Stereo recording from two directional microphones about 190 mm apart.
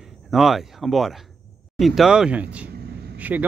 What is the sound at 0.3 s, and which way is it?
Speech, centre (ahead or behind).